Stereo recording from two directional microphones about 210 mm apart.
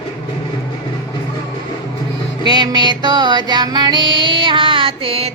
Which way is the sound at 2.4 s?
20° right (ahead or behind).